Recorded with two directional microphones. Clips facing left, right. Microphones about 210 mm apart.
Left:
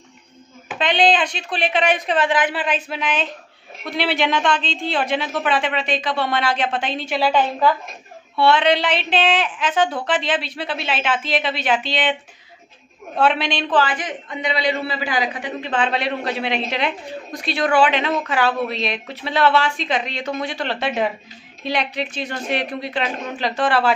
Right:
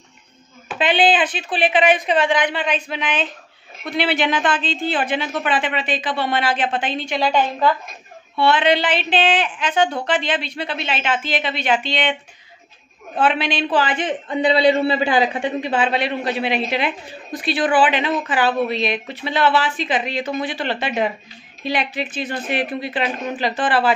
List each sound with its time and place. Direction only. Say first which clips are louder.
0.7 s a woman's voice: right 1 dB; 5° right (ahead or behind)
13.7 s a man's voice: left 1 dB; 25° right (ahead or behind)
15.6 s a woman's voice: left 1 dB; 5° right (ahead or behind)